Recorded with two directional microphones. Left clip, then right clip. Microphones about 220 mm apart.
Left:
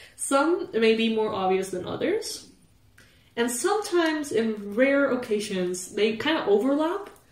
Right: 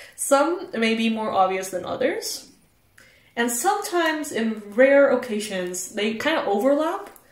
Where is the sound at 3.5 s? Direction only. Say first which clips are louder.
Right 2 dB; 25° right (ahead or behind).